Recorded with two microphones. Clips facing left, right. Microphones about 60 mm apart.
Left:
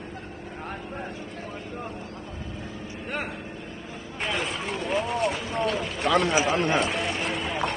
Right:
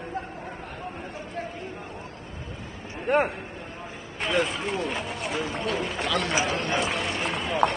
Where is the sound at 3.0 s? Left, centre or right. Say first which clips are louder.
Right 10 dB; right.